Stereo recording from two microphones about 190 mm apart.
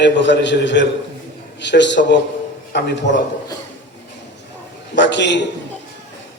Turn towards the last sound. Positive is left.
turn(degrees=65)  # may be behind; listen again after turning